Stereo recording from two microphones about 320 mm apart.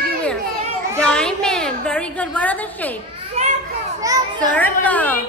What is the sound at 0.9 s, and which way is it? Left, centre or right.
A woman's voice, centre.